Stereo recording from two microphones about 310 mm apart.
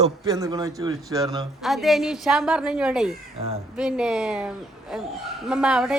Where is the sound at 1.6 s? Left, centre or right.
Centre.